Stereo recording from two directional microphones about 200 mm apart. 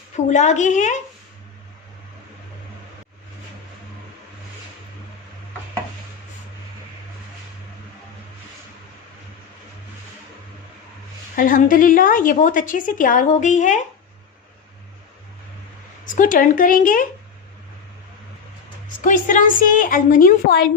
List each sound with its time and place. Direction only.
0.3 s a woman's voice: 35° left (ahead or behind)
11.3 s a woman's voice: 45° left (ahead or behind)
16.0 s a woman's voice: 40° left (ahead or behind)
19.0 s a woman's voice: 40° left (ahead or behind)